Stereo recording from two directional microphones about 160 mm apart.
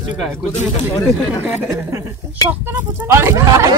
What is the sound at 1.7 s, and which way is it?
Speech, 20° right (ahead or behind).